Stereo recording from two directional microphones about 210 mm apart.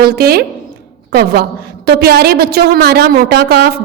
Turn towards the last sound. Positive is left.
turn(degrees=-50)  # may be behind; listen again after turning